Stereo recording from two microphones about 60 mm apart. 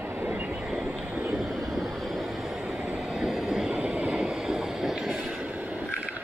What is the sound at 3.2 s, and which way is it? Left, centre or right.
Train, centre.